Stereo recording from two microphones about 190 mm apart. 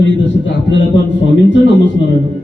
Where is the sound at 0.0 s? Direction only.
75° left (ahead or behind).